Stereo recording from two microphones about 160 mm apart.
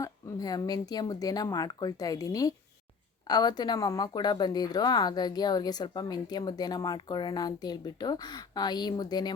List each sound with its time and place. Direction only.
0.0 s speech: 20° left (ahead or behind)